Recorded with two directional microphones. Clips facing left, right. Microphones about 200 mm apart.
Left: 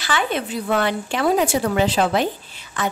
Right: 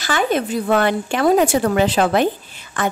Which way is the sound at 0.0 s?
45° right (ahead or behind).